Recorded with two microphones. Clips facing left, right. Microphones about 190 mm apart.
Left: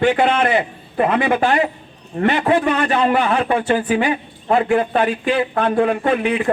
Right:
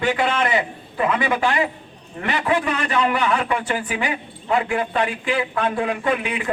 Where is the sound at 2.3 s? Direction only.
35° left (ahead or behind).